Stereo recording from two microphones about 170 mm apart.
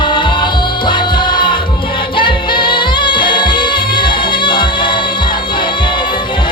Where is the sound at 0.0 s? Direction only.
25° left (ahead or behind).